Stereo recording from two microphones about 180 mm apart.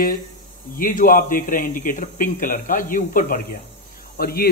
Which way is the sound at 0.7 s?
50° left (ahead or behind).